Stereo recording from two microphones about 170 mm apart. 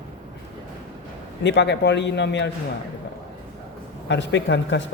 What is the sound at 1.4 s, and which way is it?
Speech, 90° left.